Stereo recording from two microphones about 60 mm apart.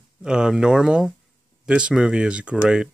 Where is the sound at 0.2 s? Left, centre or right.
Centre.